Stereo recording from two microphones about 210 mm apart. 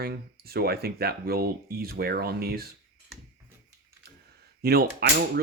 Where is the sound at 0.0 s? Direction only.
50° right (ahead or behind).